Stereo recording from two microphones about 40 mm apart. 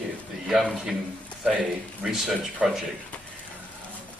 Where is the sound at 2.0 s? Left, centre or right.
Centre.